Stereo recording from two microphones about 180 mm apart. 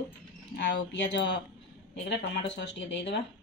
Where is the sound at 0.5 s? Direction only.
75° left (ahead or behind).